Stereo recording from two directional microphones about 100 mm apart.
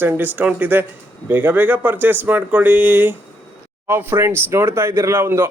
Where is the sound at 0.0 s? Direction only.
20° right (ahead or behind).